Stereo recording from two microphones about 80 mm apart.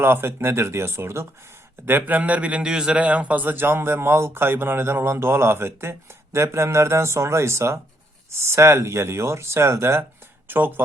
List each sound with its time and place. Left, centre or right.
0.0 s a man's voice: right